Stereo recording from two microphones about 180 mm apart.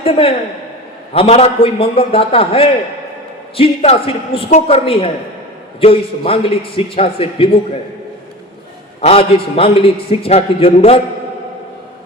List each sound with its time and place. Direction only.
0.0 s a man's voice: 30° left (ahead or behind)
9.0 s a man's voice: 35° left (ahead or behind)